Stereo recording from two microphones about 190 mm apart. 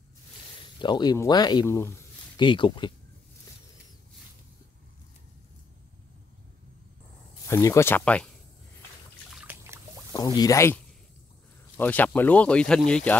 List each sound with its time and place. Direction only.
0.7 s speech: 25° left (ahead or behind)
2.3 s speech: 25° left (ahead or behind)
7.4 s speech: 15° left (ahead or behind)
9.3 s trickle: 10° right (ahead or behind)
10.1 s speech: 20° left (ahead or behind)